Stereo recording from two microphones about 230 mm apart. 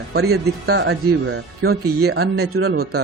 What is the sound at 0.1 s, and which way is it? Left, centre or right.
A man's voice, right.